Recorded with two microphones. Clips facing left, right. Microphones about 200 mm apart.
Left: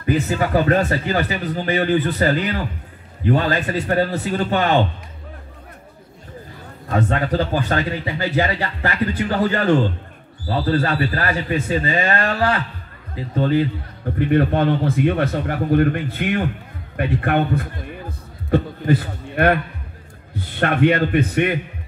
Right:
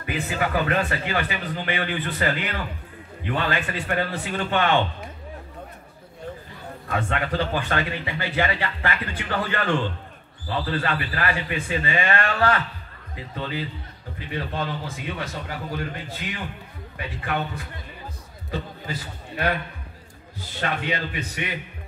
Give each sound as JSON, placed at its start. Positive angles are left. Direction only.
{"t": 0.0, "sound": "speech", "side_deg": 40}
{"t": 6.9, "sound": "speech", "side_deg": 35}
{"t": 13.3, "sound": "a man's voice", "side_deg": 45}
{"t": 18.5, "sound": "a sound", "side_deg": 60}
{"t": 20.3, "sound": "a man's voice", "side_deg": 60}